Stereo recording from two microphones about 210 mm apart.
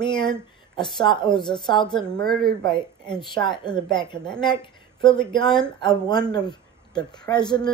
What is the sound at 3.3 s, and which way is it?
Speech, 20° left (ahead or behind).